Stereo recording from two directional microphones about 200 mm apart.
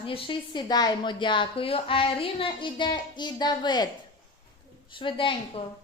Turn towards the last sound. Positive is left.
turn(degrees=25)  # may be behind; listen again after turning